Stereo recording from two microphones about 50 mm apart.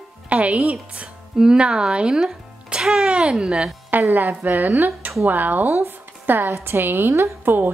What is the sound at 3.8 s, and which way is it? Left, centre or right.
A woman's voice, right.